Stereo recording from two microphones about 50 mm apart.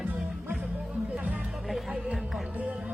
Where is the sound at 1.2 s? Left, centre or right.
Right.